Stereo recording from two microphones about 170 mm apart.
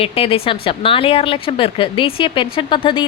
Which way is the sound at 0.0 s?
35° left (ahead or behind).